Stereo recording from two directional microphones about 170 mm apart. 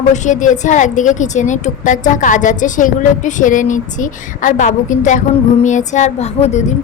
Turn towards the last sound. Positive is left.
turn(degrees=45)  # may be behind; listen again after turning